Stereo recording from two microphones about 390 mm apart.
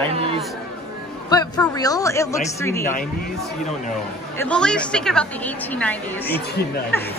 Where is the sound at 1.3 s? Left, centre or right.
Centre.